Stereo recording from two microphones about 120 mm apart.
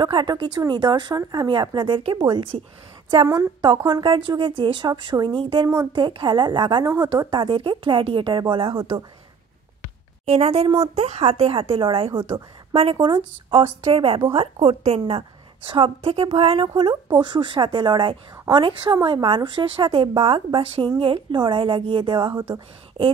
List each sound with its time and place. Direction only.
0.0 s speech: 40° right (ahead or behind)
3.3 s a woman's voice: 30° right (ahead or behind)
3.6 s a woman's voice: 40° right (ahead or behind)
10.2 s a woman's voice: 60° right (ahead or behind); by 22.3 s 45° right (ahead or behind)
22.3 s a woman's voice: 20° right (ahead or behind)